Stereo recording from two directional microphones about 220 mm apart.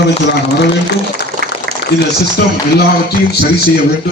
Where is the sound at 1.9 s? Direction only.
50° left (ahead or behind).